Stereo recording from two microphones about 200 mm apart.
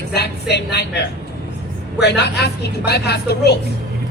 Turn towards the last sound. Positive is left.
turn(degrees=55)  # may be behind; listen again after turning